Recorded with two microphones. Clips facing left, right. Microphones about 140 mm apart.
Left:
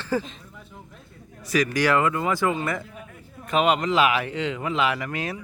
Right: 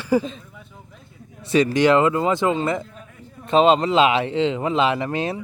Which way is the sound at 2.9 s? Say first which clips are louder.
Even; 5° left (ahead or behind).